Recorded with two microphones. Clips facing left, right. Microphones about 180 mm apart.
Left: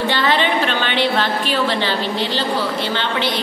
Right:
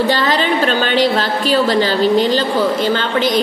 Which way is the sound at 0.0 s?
40° right (ahead or behind).